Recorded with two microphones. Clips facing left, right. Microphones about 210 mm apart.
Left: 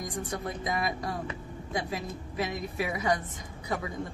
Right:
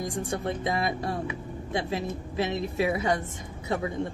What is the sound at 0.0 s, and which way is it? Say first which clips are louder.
Speech: right 4 dB; 25° right (ahead or behind).